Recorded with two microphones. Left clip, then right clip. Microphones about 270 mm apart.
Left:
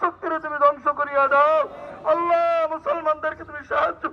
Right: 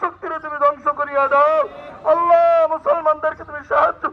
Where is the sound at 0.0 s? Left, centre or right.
Centre.